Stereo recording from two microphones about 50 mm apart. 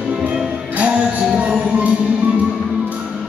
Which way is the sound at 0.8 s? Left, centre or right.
Right.